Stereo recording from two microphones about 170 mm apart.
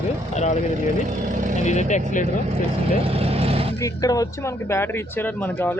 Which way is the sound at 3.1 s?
35° right (ahead or behind).